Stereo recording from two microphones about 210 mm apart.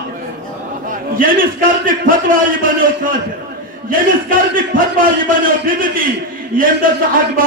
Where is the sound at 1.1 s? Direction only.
40° right (ahead or behind).